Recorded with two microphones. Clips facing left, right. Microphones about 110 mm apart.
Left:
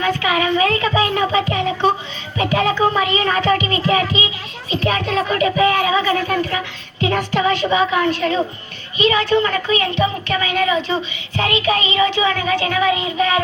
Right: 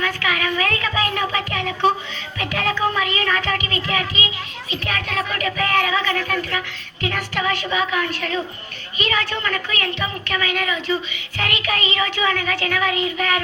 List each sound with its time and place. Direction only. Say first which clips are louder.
0.0 s speech: left 5 dB; 25° left (ahead or behind)
2.4 s music: left 6 dB; 25° left (ahead or behind)
2.9 s a woman's voice: left 4 dB; 25° left (ahead or behind)